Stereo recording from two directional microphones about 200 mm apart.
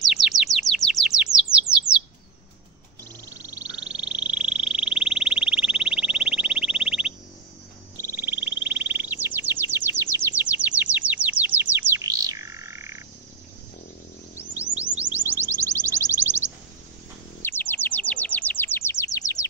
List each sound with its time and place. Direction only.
0.0 s chirp: centre (ahead or behind)
3.5 s frog: 5° right (ahead or behind)
8.0 s bird: 10° right (ahead or behind)
14.8 s music: 5° right (ahead or behind)
17.4 s chirp: 10° left (ahead or behind)